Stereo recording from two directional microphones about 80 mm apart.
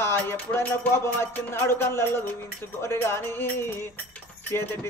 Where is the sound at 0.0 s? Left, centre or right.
Left.